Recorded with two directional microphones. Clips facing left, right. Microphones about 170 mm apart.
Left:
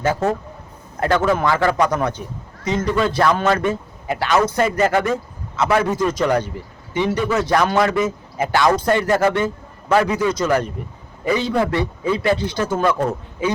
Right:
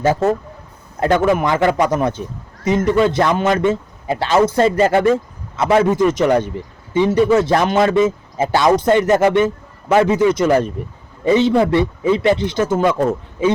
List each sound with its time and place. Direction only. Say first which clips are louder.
0.9 s speech: right 3 dB; 20° right (ahead or behind)